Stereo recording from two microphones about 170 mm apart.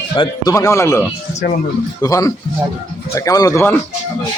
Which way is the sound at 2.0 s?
20° left (ahead or behind).